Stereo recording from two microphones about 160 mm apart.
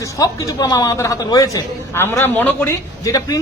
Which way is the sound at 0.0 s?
20° left (ahead or behind).